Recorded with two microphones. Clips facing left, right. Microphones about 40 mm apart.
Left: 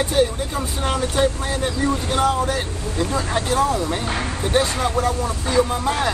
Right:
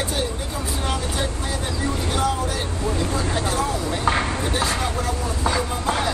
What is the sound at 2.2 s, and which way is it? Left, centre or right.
Speech, left.